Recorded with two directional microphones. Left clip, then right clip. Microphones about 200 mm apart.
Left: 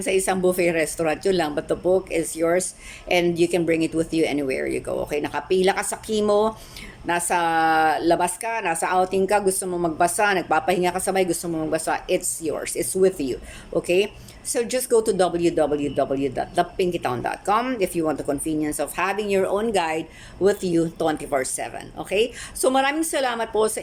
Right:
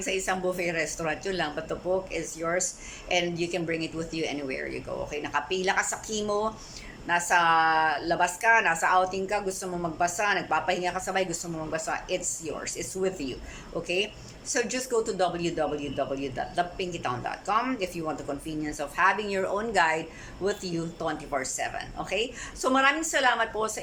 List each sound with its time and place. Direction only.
0.0 s speech: 20° left (ahead or behind)